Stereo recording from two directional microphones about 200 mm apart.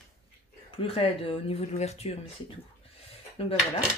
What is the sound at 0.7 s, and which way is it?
Speech, 30° left (ahead or behind).